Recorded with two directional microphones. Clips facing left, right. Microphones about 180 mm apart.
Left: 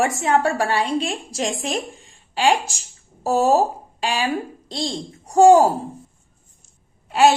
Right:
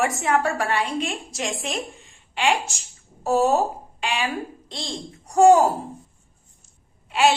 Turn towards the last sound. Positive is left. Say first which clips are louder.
# left 4 dB
turn(degrees=40)  # may be behind; listen again after turning